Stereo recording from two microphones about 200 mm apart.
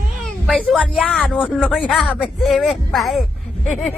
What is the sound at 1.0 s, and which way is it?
Speech, 5° left (ahead or behind).